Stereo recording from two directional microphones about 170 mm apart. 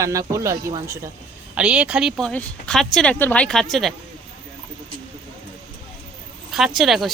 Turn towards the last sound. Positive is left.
turn(degrees=0)  # may be behind; listen again after turning